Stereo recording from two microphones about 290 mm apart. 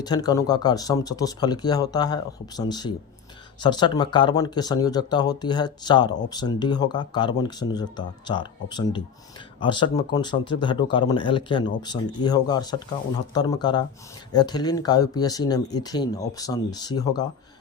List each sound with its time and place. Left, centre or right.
0.0 s speech: centre